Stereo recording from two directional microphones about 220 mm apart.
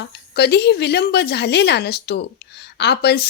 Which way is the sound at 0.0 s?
50° left (ahead or behind).